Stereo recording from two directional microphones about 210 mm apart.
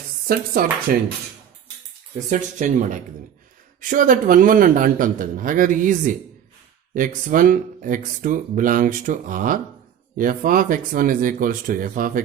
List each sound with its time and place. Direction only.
0.3 s speech: 45° right (ahead or behind)
2.1 s speech: 35° right (ahead or behind)